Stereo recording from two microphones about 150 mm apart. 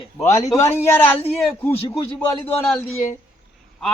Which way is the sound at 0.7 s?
15° left (ahead or behind).